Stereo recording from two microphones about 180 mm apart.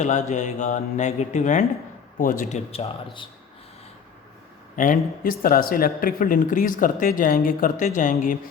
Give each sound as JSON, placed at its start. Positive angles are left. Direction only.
{"t": 0.0, "sound": "speech", "side_deg": 40}
{"t": 4.8, "sound": "speech", "side_deg": 50}